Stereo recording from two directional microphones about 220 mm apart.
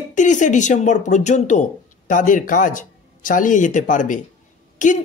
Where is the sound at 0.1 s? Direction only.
35° left (ahead or behind).